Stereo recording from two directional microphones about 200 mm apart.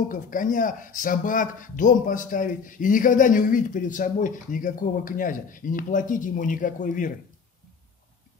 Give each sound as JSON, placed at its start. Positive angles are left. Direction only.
{"t": 0.1, "sound": "speech", "side_deg": 40}